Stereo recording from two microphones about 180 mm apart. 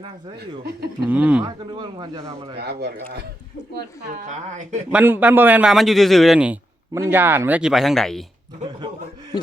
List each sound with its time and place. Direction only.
1.0 s a man's voice: 10° right (ahead or behind)
1.5 s speech: 25° right (ahead or behind)
2.6 s speech: 65° right (ahead or behind)
3.8 s speech: 45° right (ahead or behind)
4.9 s a man's voice: 10° right (ahead or behind)